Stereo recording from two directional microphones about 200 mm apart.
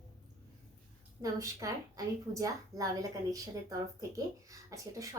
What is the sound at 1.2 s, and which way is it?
A woman's voice, 15° right (ahead or behind).